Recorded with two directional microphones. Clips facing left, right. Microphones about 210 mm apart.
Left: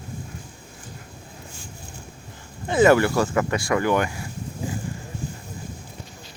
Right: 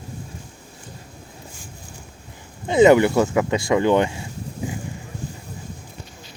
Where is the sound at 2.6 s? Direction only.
20° right (ahead or behind).